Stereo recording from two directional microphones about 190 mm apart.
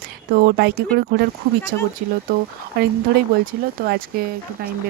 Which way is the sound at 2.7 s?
55° right (ahead or behind).